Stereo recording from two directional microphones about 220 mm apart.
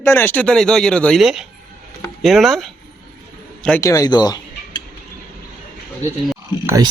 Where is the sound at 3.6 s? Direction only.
10° left (ahead or behind).